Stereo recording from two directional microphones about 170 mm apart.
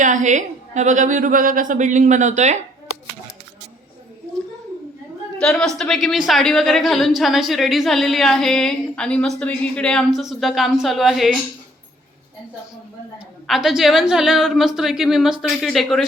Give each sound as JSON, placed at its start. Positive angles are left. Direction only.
{"t": 0.0, "sound": "a woman's voice", "side_deg": -45}
{"t": 5.4, "sound": "a woman's voice", "side_deg": 5}
{"t": 13.1, "sound": "a woman's voice", "side_deg": -5}